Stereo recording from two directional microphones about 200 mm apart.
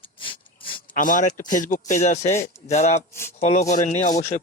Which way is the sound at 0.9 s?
40° left (ahead or behind).